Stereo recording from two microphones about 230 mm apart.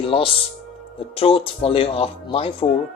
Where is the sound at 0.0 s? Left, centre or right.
Left.